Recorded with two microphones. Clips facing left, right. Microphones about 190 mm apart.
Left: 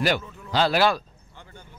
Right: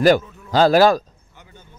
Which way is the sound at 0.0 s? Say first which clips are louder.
Right 10 dB; 45° right (ahead or behind).